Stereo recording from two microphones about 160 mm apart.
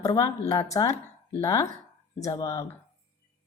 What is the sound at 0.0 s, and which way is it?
A woman's voice, 20° left (ahead or behind).